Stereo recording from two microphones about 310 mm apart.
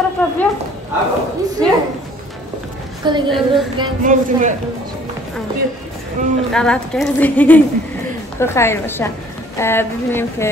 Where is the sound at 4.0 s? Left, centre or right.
Right.